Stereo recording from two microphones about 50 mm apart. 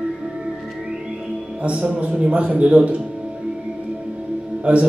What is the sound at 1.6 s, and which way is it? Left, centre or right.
A man's voice, right.